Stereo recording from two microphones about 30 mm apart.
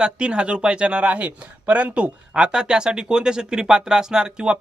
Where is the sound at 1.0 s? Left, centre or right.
Right.